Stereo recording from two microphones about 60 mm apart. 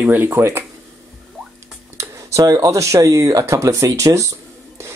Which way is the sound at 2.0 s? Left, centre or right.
Right.